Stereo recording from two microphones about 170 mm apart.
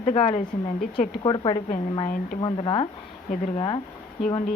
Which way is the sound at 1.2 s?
30° left (ahead or behind).